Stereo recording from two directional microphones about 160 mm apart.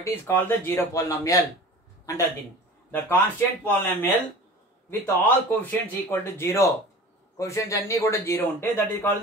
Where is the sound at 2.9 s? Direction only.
10° left (ahead or behind).